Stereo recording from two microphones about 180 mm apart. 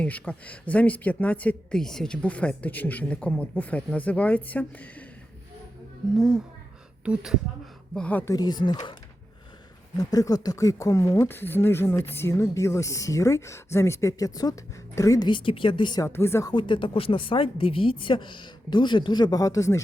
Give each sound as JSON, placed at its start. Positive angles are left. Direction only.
{"t": 0.0, "sound": "speech", "side_deg": 10}
{"t": 6.1, "sound": "speech", "side_deg": 0}
{"t": 7.9, "sound": "a woman's voice", "side_deg": 10}
{"t": 10.0, "sound": "a woman's voice", "side_deg": 20}
{"t": 16.5, "sound": "a woman's voice", "side_deg": 25}